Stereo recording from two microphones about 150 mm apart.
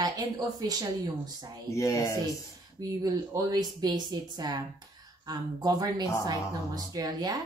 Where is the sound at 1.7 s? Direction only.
20° left (ahead or behind).